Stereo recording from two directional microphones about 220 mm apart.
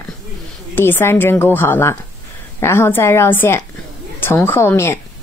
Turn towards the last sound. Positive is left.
turn(degrees=10)  # may be behind; listen again after turning